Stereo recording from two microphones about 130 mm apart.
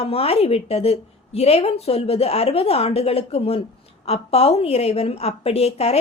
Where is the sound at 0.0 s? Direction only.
50° left (ahead or behind).